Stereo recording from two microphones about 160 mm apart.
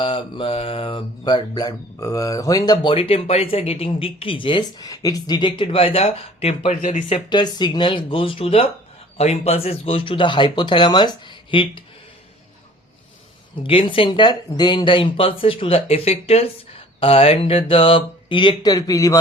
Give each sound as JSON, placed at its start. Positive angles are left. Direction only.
{"t": 0.0, "sound": "music", "side_deg": 30}
{"t": 7.1, "sound": "music", "side_deg": 25}
{"t": 13.6, "sound": "music", "side_deg": 35}